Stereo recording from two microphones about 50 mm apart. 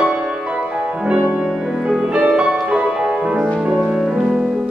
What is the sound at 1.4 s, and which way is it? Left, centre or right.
Music, centre.